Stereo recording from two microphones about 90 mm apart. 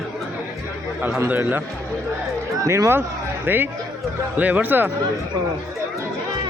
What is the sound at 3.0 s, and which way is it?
Speech, 20° right (ahead or behind).